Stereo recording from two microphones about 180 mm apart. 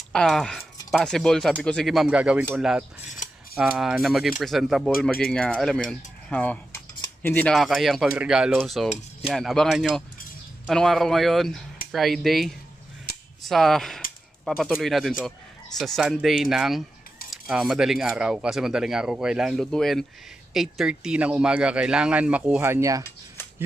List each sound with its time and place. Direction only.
0.1 s speech: 5° left (ahead or behind)
8.8 s cutlery: 40° left (ahead or behind)
9.3 s speech: centre (ahead or behind)
13.1 s cap gun: 60° left (ahead or behind)
13.4 s speech: centre (ahead or behind); by 23.0 s 15° right (ahead or behind)